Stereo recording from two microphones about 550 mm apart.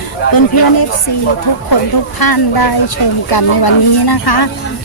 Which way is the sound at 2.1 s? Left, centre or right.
Left.